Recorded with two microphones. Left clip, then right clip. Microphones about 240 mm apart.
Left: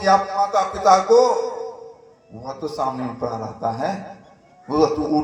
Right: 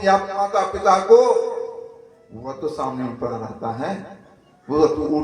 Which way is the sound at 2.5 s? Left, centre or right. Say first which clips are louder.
Left 1 dB; left.